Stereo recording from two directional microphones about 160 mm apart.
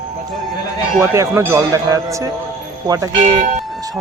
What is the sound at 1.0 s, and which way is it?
Speech, 15° right (ahead or behind).